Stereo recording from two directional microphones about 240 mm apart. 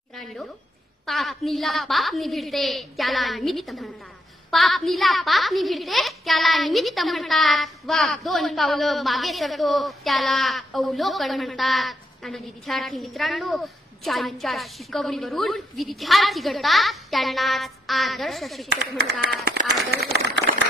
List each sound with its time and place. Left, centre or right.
0.1 s a woman's voice: centre
19.9 s speech: right